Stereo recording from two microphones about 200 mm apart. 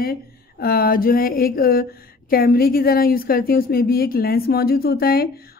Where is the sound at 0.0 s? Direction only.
50° left (ahead or behind).